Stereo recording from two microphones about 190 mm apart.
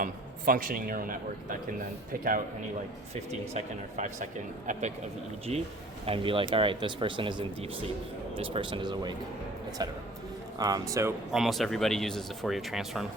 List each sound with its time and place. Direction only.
0.0 s a man's voice: 45° right (ahead or behind)
3.5 s speech: 40° right (ahead or behind)
5.5 s speech: 30° right (ahead or behind)
10.6 s speech: 20° right (ahead or behind)
11.3 s speech: centre (ahead or behind)